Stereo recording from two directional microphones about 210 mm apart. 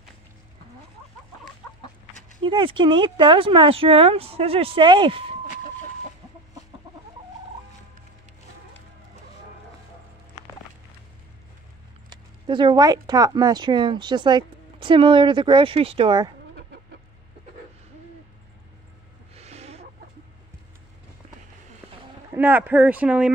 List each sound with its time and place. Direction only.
2.4 s speech: 25° right (ahead or behind)
12.1 s speech: 20° right (ahead or behind)
16.5 s chicken: 55° right (ahead or behind)
19.3 s a sound: 30° right (ahead or behind)
22.3 s speech: 10° right (ahead or behind)